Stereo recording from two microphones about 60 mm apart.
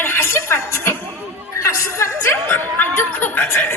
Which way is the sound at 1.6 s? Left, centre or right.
Left.